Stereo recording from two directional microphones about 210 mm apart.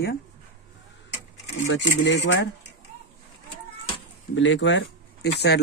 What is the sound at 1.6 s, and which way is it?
Speech, 60° left (ahead or behind).